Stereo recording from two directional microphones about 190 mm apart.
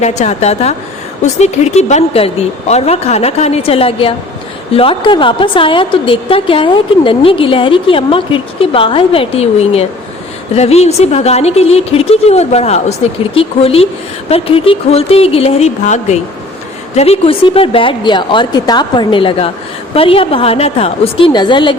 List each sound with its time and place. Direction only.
0.0 s a woman's voice: 35° left (ahead or behind)